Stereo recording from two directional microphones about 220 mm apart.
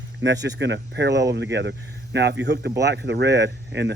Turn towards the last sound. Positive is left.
turn(degrees=-50)  # may be behind; listen again after turning